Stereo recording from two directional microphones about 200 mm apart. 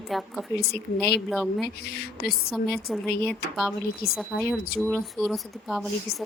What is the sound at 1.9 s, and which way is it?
Speech, 50° left (ahead or behind).